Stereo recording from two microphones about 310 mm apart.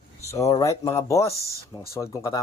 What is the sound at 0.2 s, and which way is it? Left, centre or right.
Speech, centre.